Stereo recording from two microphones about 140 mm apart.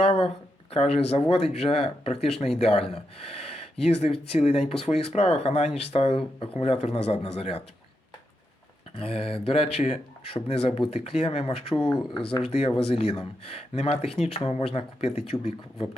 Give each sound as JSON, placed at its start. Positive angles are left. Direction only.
{"t": 0.0, "sound": "a sound", "side_deg": 45}
{"t": 0.7, "sound": "speech", "side_deg": 45}
{"t": 9.0, "sound": "speech", "side_deg": 45}